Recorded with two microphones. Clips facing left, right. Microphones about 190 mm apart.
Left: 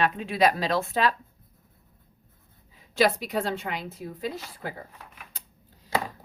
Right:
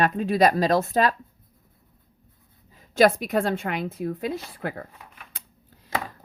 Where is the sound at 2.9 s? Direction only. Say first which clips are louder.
Right 5 dB; 50° right (ahead or behind).